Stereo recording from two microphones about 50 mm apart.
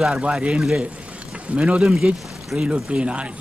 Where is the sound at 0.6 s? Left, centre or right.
Centre.